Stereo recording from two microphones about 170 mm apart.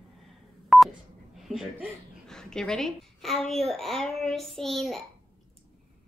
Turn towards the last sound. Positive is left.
turn(degrees=0)  # may be behind; listen again after turning